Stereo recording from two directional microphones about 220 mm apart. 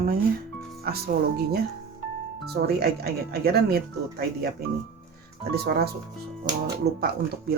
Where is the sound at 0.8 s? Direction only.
45° right (ahead or behind).